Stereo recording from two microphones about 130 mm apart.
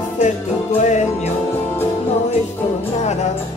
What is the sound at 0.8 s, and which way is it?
Music, 60° left (ahead or behind).